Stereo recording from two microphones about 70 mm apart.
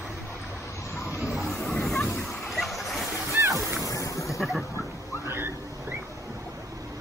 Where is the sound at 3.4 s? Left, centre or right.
Right.